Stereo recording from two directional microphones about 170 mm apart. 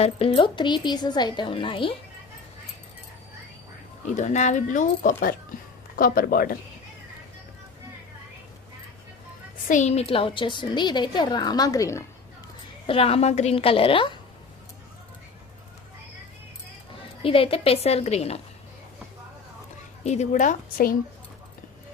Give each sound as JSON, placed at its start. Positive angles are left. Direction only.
{"t": 0.0, "sound": "a woman's voice", "side_deg": 30}
{"t": 4.0, "sound": "speech", "side_deg": 45}
{"t": 9.6, "sound": "a woman's voice", "side_deg": 45}
{"t": 12.9, "sound": "a woman's voice", "side_deg": 35}
{"t": 17.2, "sound": "a woman's voice", "side_deg": 35}
{"t": 20.1, "sound": "speech", "side_deg": 45}